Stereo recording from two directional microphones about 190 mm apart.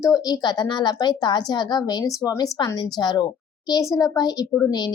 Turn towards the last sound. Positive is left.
turn(degrees=15)  # may be behind; listen again after turning